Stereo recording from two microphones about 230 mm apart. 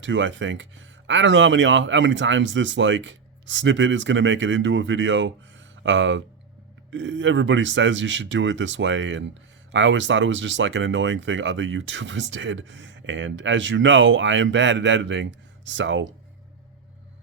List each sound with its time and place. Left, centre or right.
0.0 s speech: right